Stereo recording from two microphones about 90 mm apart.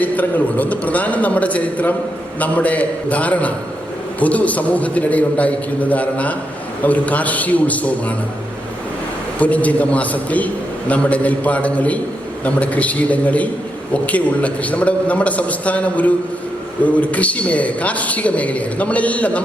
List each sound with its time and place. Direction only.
0.0 s a man's voice: 20° left (ahead or behind)
9.4 s a man's voice: 15° left (ahead or behind)